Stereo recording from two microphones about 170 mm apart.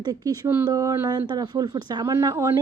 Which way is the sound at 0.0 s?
20° right (ahead or behind).